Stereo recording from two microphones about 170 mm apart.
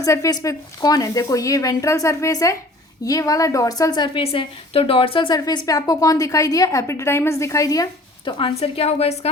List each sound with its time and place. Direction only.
0.0 s a woman's voice: 20° left (ahead or behind); by 9.3 s 40° left (ahead or behind)